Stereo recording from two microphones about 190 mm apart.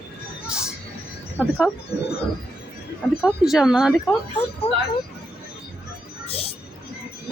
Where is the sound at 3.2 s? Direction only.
Centre (ahead or behind).